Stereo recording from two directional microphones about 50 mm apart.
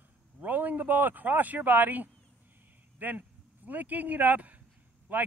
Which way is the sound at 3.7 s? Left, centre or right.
Right.